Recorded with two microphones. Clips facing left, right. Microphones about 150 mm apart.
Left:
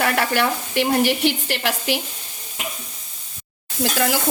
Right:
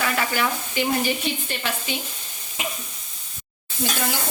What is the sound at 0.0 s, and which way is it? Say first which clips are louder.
Speech: left 4 dB; 65° left (ahead or behind).